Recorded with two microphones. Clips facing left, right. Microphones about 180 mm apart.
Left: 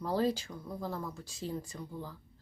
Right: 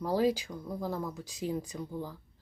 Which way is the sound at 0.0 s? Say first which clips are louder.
Right 3 dB; 10° right (ahead or behind).